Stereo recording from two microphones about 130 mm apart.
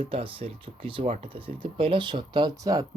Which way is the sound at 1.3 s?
40° right (ahead or behind).